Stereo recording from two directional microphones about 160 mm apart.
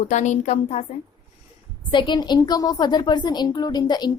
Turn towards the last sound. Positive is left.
turn(degrees=25)  # may be behind; listen again after turning